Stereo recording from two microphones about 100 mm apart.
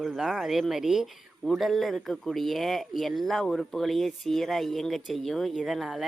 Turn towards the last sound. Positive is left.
turn(degrees=0)  # may be behind; listen again after turning